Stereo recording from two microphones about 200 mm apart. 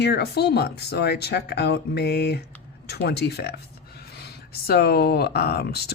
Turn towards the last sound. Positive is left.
turn(degrees=55)  # may be behind; listen again after turning